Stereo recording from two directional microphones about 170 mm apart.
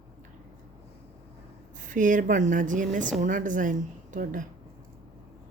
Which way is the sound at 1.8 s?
50° right (ahead or behind).